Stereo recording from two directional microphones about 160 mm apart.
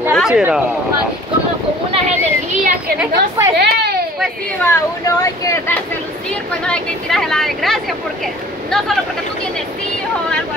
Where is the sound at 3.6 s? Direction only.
85° right.